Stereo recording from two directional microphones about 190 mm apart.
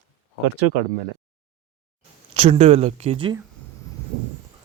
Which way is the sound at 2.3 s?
30° right (ahead or behind).